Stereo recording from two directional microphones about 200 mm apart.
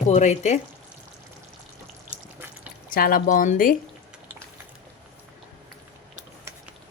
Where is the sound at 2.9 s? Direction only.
45° left (ahead or behind).